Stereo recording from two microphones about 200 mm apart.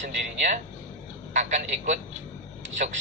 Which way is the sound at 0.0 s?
40° right (ahead or behind).